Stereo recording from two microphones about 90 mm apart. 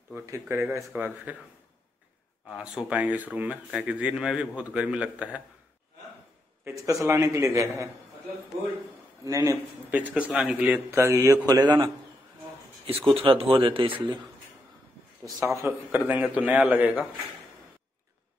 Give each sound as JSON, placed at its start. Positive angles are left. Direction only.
{"t": 0.1, "sound": "speech", "side_deg": -30}
{"t": 2.5, "sound": "a man's voice", "side_deg": -10}
{"t": 6.7, "sound": "a man's voice", "side_deg": -35}
{"t": 9.2, "sound": "a man's voice", "side_deg": -40}
{"t": 9.8, "sound": "a man's voice", "side_deg": -15}
{"t": 10.9, "sound": "a man's voice", "side_deg": -35}
{"t": 11.4, "sound": "speech", "side_deg": -45}
{"t": 12.8, "sound": "speech", "side_deg": -90}
{"t": 15.4, "sound": "a man's voice", "side_deg": -30}
{"t": 15.9, "sound": "a man's voice", "side_deg": -15}